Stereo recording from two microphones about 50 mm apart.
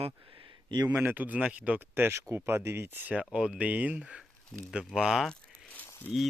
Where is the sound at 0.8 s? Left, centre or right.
Right.